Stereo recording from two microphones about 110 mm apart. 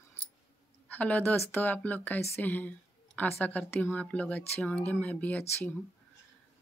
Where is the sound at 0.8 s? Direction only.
15° left (ahead or behind).